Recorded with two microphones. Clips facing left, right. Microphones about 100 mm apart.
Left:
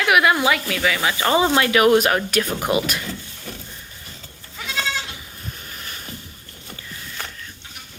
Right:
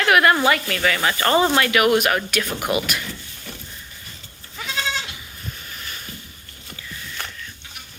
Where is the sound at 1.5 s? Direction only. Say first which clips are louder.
Left 2 dB; 25° left (ahead or behind).